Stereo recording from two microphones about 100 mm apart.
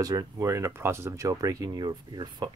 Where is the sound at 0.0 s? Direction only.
40° right (ahead or behind).